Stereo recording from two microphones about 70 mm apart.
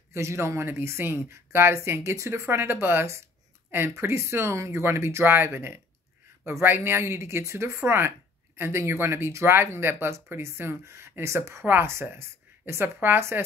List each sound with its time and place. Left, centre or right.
0.1 s speech: right